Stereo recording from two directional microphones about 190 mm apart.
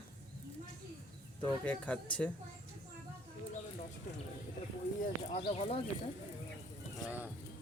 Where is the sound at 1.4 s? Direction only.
5° left (ahead or behind).